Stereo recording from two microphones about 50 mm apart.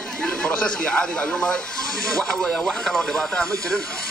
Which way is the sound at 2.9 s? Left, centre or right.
Centre.